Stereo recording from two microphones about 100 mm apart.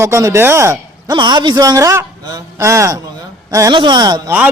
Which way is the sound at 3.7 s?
50° right (ahead or behind).